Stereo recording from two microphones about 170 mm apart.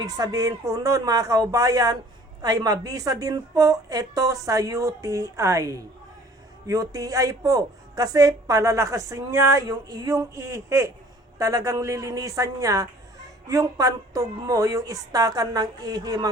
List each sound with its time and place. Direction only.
0.0 s speech: 20° right (ahead or behind)